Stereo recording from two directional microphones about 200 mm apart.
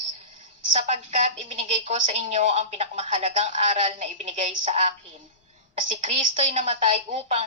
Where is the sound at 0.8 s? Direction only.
35° right (ahead or behind).